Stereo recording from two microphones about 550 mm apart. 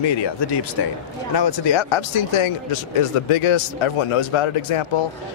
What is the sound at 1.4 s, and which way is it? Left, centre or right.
Speech, left.